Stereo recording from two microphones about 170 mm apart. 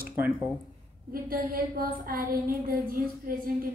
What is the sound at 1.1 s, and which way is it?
Speech, 60° right (ahead or behind).